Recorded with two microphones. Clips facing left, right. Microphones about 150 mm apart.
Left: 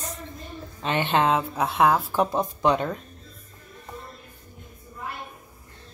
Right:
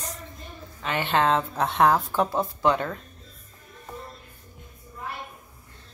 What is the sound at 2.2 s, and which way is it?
Speech, 15° left (ahead or behind).